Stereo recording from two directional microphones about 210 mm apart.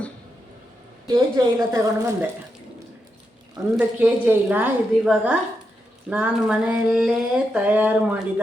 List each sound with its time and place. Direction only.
1.0 s a woman's voice: 20° right (ahead or behind)
3.8 s a woman's voice: 5° right (ahead or behind)
6.1 s a sound: 5° right (ahead or behind)